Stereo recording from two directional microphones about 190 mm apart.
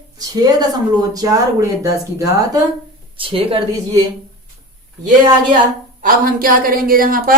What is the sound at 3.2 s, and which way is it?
Speech, 30° right (ahead or behind).